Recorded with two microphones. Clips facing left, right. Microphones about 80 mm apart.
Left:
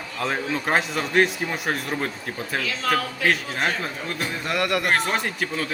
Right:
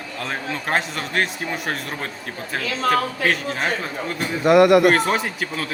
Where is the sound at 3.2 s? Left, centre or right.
Centre.